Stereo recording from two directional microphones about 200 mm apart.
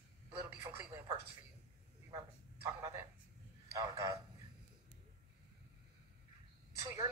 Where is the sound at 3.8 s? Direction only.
15° right (ahead or behind).